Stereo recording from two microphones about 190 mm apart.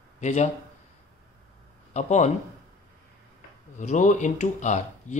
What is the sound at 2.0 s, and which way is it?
Speech, 40° left (ahead or behind).